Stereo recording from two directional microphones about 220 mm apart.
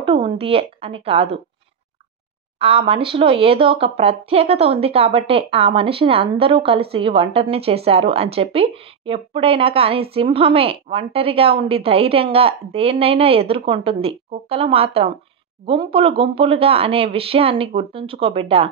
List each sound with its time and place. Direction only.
0.0 s a woman's voice: 25° right (ahead or behind)
2.6 s speech: 25° right (ahead or behind)